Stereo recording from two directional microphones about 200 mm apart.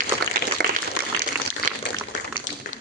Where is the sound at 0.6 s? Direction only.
50° right (ahead or behind).